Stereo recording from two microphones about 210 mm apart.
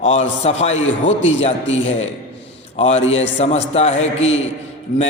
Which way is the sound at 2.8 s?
30° left (ahead or behind).